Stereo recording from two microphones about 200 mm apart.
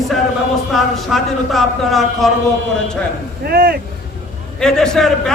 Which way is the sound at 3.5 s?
50° right (ahead or behind).